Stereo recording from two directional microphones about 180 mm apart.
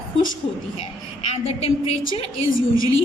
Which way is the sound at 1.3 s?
35° left (ahead or behind).